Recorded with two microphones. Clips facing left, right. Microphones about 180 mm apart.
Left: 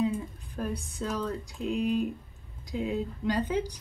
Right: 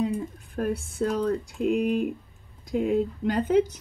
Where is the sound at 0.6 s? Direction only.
50° right (ahead or behind).